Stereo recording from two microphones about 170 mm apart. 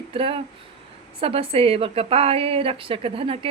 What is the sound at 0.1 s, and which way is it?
A woman's voice, 30° right (ahead or behind).